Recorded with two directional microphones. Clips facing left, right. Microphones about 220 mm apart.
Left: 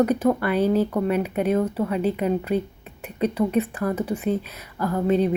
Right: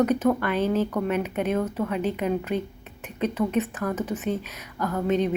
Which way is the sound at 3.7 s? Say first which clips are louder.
Left 3 dB; 10° left (ahead or behind).